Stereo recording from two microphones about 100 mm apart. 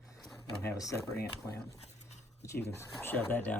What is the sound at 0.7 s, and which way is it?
Speech, 35° left (ahead or behind).